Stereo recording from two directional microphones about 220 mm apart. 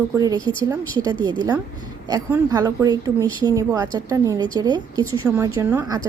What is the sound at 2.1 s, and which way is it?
A woman's voice, 15° right (ahead or behind).